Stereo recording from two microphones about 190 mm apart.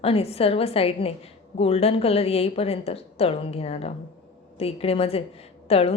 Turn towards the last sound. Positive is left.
turn(degrees=30)  # may be behind; listen again after turning